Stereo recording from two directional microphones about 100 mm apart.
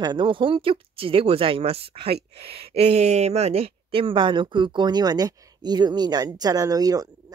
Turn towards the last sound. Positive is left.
turn(degrees=-40)  # may be behind; listen again after turning